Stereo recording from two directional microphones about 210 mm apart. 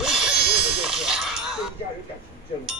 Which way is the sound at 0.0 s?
5° right (ahead or behind).